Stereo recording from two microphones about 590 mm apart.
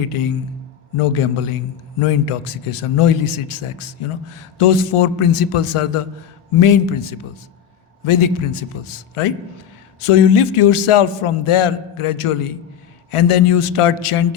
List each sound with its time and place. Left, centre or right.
0.9 s a man's voice: left